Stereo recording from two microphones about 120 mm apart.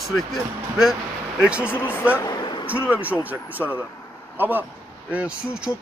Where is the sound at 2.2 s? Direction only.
40° left (ahead or behind).